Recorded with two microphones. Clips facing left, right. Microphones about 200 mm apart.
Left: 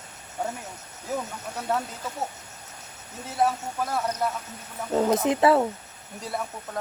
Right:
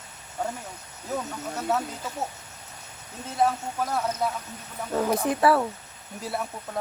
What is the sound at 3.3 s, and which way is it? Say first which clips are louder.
Speech: even; centre (ahead or behind).